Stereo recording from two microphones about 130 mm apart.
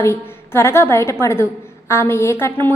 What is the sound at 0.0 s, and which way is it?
A woman's voice, 20° left (ahead or behind).